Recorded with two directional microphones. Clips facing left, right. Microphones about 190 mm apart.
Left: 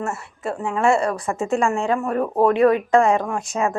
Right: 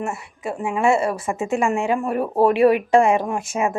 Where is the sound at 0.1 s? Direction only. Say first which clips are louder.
Left 1 dB; centre (ahead or behind).